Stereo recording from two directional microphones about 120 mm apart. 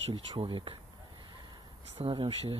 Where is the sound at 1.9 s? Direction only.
45° right (ahead or behind).